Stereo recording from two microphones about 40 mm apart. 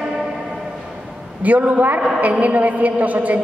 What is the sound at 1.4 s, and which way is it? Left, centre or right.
A woman's voice, right.